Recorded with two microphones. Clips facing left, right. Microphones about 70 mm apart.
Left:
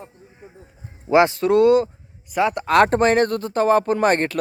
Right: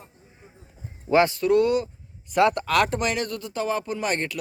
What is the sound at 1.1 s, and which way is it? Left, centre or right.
Speech, left.